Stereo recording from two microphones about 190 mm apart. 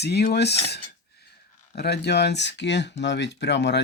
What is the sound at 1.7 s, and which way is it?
Speech, 60° left (ahead or behind).